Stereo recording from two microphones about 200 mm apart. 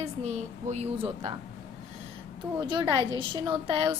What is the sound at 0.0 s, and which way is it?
A woman's voice, 35° right (ahead or behind).